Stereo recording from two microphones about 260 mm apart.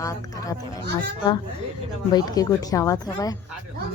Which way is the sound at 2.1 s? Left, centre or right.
Centre.